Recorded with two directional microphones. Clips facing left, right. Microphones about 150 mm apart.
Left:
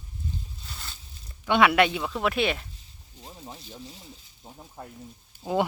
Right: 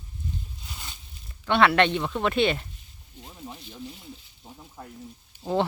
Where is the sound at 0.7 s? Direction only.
15° right (ahead or behind).